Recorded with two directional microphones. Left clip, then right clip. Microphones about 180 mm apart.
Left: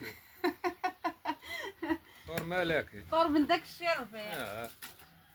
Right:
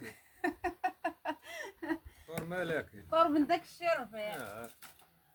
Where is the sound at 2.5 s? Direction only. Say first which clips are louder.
Left 5 dB; 45° left (ahead or behind).